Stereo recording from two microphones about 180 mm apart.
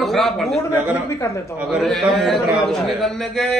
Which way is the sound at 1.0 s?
15° left (ahead or behind).